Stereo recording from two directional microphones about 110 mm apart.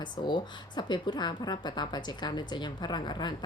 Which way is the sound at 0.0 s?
45° left (ahead or behind).